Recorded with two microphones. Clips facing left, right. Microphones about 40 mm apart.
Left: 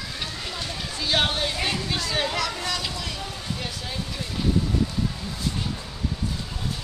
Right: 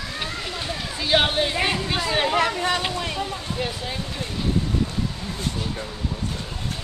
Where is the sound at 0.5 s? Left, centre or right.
Centre; by 3.2 s right.